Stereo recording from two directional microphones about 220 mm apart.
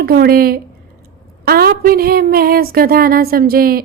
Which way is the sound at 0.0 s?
45° right (ahead or behind).